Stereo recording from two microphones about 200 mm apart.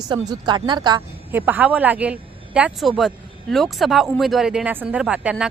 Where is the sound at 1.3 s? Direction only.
10° right (ahead or behind).